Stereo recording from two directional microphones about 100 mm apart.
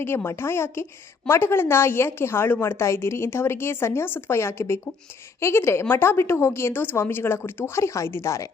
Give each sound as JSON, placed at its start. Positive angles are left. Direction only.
{"t": 0.0, "sound": "a woman's voice", "side_deg": 25}